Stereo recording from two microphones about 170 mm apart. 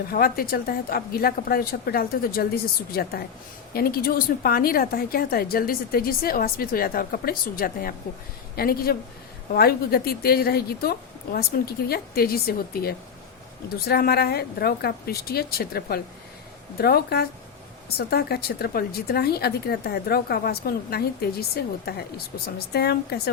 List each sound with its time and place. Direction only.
0.1 s a woman's voice: 60° left (ahead or behind)